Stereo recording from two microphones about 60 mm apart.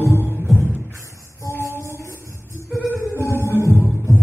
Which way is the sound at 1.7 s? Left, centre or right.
Left.